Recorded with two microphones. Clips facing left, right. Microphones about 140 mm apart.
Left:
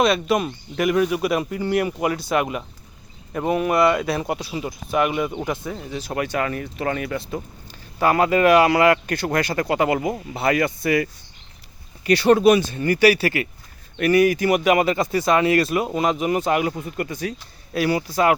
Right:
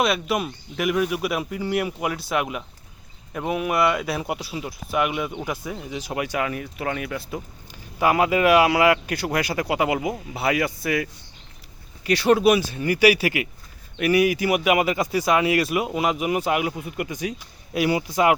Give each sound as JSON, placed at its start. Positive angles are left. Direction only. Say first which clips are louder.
{"t": 0.0, "sound": "speech", "louder": "left 4 dB", "side_deg": -5}